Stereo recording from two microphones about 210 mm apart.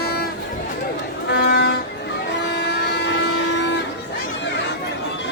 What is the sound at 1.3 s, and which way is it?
Vehicle, 55° left (ahead or behind).